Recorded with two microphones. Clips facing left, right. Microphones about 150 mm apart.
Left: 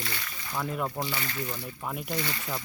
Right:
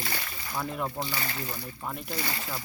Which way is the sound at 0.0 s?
35° right (ahead or behind).